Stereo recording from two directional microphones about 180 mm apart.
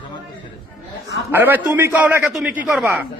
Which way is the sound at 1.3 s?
10° right (ahead or behind).